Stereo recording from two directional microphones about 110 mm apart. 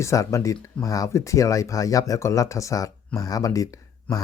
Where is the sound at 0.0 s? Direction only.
25° left (ahead or behind).